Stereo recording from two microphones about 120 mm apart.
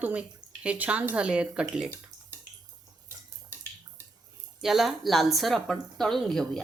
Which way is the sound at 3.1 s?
20° right (ahead or behind).